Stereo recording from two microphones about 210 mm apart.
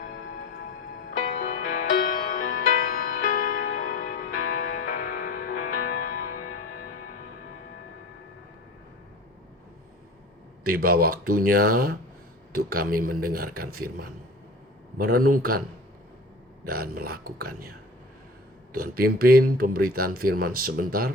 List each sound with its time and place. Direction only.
1.1 s music: 40° left (ahead or behind)
10.7 s speech: 45° right (ahead or behind)
14.9 s speech: 45° right (ahead or behind)
16.6 s speech: 45° right (ahead or behind)